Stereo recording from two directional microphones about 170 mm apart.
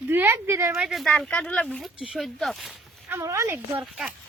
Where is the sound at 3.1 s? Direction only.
15° right (ahead or behind).